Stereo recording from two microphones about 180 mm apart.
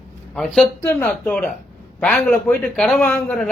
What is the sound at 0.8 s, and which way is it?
A man's voice, 15° left (ahead or behind).